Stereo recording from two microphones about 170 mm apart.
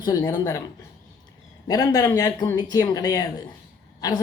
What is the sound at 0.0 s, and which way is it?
Speech, 20° left (ahead or behind).